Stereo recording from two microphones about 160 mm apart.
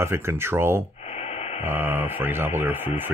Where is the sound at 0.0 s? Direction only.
15° right (ahead or behind).